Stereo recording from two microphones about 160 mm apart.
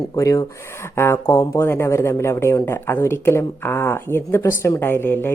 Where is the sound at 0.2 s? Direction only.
20° left (ahead or behind).